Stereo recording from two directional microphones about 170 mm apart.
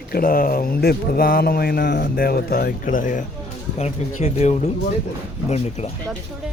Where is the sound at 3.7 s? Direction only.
40° left (ahead or behind).